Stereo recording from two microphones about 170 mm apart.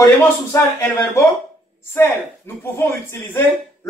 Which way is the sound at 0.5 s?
15° left (ahead or behind).